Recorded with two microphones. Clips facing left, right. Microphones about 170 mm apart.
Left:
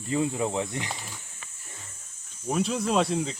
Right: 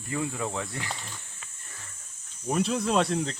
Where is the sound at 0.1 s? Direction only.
20° left (ahead or behind).